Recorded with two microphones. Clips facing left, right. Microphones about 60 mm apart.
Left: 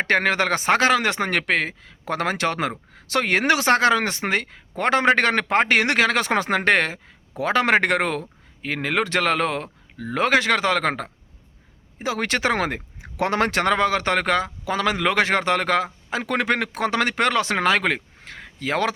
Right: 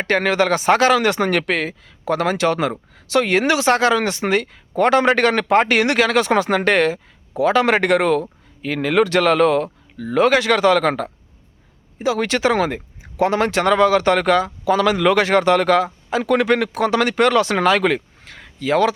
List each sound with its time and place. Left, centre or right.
0.0 s a man's voice: left
13.0 s a man's voice: left